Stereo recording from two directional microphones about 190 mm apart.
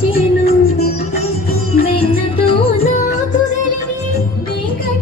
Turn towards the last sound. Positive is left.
turn(degrees=40)  # may be behind; listen again after turning